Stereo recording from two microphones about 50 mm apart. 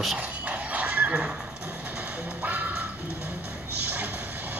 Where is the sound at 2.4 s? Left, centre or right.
Right.